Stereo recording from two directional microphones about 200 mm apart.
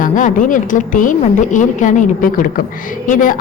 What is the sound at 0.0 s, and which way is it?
A woman's voice, 40° left (ahead or behind).